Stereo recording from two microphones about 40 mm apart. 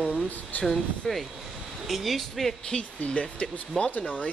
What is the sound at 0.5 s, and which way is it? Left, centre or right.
Speech, left.